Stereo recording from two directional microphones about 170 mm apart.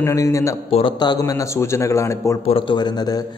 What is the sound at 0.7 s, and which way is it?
A man's voice, 30° left (ahead or behind).